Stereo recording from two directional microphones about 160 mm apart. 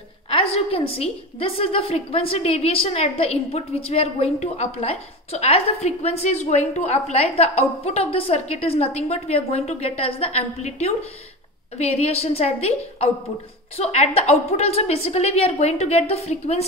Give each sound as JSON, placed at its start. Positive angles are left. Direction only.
{"t": 0.3, "sound": "a woman's voice", "side_deg": 35}